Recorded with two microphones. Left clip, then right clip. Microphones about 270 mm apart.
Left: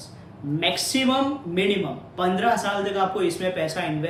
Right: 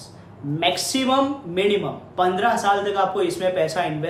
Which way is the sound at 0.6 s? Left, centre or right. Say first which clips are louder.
Right 2 dB; centre.